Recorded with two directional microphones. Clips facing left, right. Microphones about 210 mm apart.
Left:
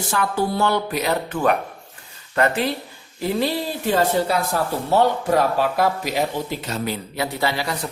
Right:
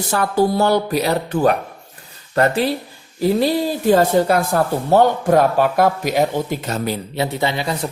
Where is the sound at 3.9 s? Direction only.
45° right (ahead or behind).